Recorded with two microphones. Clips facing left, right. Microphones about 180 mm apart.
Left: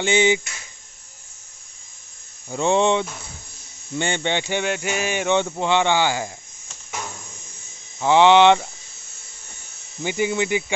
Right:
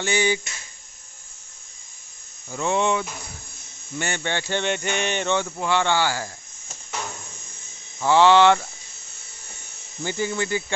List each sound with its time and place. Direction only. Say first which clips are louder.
0.0 s speech: left 4 dB; 20° left (ahead or behind)
2.5 s speech: left 4 dB; 30° left (ahead or behind)
4.6 s a sound: left 1 dB; 5° left (ahead or behind)
5.3 s speech: left 5 dB; 20° left (ahead or behind)
8.0 s speech: left 2 dB; 20° left (ahead or behind)
10.0 s a sound: left 4 dB; 15° left (ahead or behind)